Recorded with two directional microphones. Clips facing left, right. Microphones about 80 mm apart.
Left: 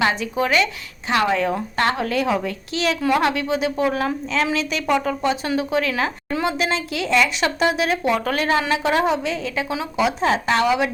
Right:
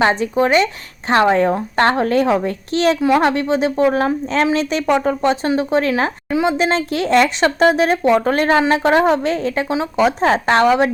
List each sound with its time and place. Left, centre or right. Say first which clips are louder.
0.0 s a woman's voice: right 5 dB; right
6.3 s a woman's voice: right 7 dB; centre
6.6 s a woman's voice: right 6 dB; right